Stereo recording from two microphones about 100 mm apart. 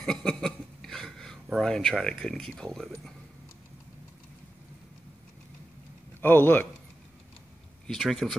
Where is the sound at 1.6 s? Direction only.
5° left (ahead or behind).